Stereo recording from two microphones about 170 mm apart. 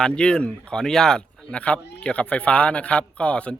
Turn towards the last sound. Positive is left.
turn(degrees=5)  # may be behind; listen again after turning